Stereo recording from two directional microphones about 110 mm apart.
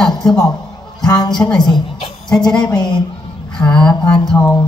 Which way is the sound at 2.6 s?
40° left (ahead or behind).